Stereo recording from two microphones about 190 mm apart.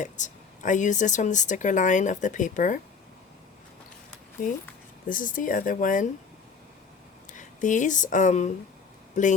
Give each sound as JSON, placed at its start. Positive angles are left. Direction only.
{"t": 0.0, "sound": "speech", "side_deg": 40}
{"t": 5.0, "sound": "speech", "side_deg": 45}
{"t": 7.3, "sound": "speech", "side_deg": 40}